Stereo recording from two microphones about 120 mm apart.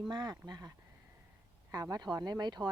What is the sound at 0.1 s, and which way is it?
Speech, 40° right (ahead or behind).